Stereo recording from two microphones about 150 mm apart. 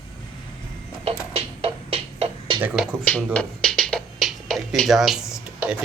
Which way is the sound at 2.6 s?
10° right (ahead or behind).